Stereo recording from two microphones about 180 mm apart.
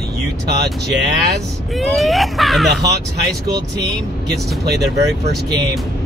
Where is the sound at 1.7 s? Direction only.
Centre (ahead or behind).